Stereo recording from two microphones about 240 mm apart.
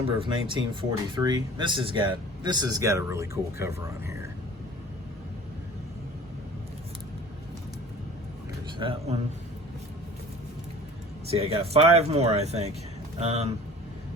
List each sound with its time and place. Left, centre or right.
0.2 s speech: right
8.8 s speech: right
11.3 s speech: right